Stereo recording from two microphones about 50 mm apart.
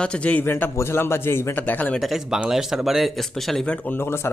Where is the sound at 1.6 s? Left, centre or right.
Left.